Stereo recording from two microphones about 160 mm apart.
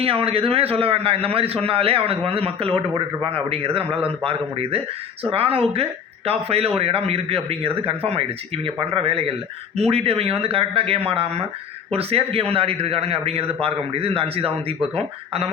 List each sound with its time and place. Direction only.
0.0 s a man's voice: 35° right (ahead or behind)